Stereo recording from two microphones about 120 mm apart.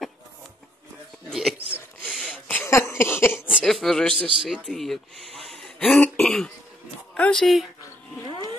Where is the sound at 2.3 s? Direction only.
15° left (ahead or behind).